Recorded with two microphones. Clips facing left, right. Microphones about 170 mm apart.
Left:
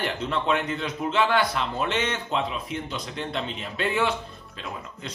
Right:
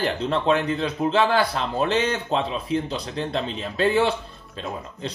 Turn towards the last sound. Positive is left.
turn(degrees=-35)  # may be behind; listen again after turning